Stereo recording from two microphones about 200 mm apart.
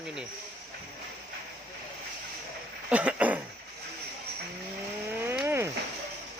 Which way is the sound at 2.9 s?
5° right (ahead or behind).